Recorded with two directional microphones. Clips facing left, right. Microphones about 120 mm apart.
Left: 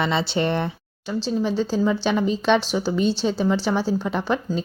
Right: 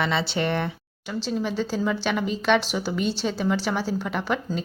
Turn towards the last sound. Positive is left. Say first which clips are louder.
# left 3 dB
turn(degrees=25)  # may be behind; listen again after turning